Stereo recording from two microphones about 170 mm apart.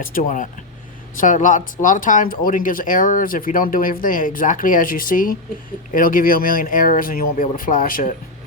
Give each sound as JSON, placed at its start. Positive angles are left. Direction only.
{"t": 0.0, "sound": "speech", "side_deg": 55}